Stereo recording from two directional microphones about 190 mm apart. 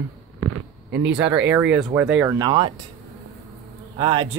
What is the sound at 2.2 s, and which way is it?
Speech, 25° right (ahead or behind).